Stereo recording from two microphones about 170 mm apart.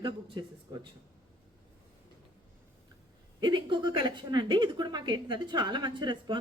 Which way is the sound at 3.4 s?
25° right (ahead or behind).